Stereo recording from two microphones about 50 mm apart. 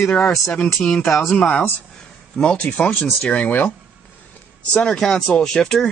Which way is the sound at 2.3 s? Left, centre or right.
Centre.